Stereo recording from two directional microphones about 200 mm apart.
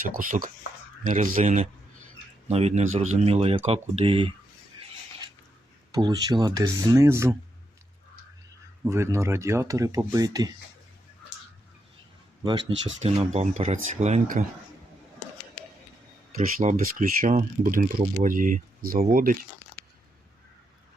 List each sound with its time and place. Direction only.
0.3 s speech: 40° right (ahead or behind)
5.9 s speech: 20° right (ahead or behind)
8.8 s speech: 15° right (ahead or behind)
12.4 s speech: 25° right (ahead or behind)
16.6 s speech: 40° right (ahead or behind)